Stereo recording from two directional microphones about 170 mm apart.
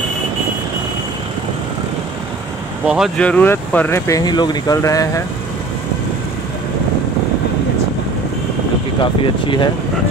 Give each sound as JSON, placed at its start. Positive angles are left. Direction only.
{"t": 2.9, "sound": "speech", "side_deg": 0}
{"t": 9.0, "sound": "speech", "side_deg": 30}